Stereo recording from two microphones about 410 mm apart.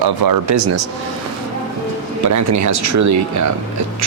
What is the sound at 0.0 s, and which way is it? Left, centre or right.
Speech, right.